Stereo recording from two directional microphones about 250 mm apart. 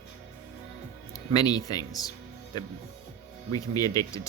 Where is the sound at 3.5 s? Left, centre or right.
Centre.